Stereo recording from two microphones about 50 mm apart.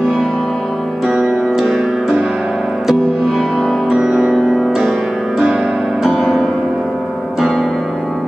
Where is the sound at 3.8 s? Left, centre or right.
Centre.